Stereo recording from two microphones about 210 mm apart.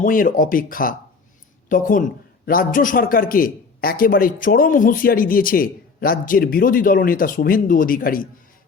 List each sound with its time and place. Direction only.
0.0 s a man's voice: 40° left (ahead or behind)